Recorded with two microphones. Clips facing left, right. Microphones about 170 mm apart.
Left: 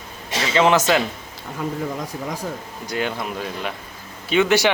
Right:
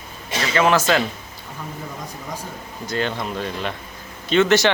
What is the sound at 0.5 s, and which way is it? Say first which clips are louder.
Speech: left 1 dB; 20° left (ahead or behind).